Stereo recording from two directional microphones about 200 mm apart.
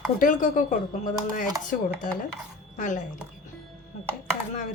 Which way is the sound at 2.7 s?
40° left (ahead or behind).